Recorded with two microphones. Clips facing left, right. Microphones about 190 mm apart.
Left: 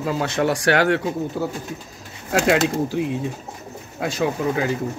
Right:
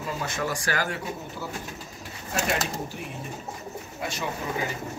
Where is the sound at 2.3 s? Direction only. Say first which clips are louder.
Left 10 dB; 90° left.